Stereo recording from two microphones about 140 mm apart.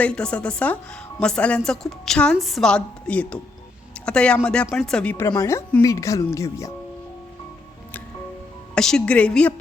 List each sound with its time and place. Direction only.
0.0 s a woman's voice: 5° left (ahead or behind)
5.4 s a woman's voice: 20° left (ahead or behind)
8.7 s a woman's voice: 5° left (ahead or behind)